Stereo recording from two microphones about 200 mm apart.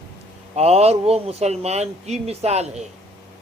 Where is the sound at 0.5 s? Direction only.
30° right (ahead or behind).